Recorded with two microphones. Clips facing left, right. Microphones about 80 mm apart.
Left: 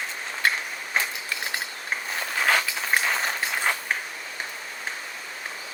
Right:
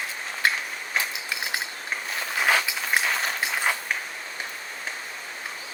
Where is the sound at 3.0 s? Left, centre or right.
Centre.